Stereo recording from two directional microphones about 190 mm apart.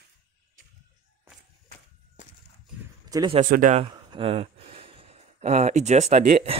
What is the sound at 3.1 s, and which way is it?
Speech, 20° right (ahead or behind).